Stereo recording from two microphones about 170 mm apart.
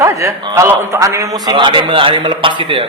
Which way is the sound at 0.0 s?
15° right (ahead or behind).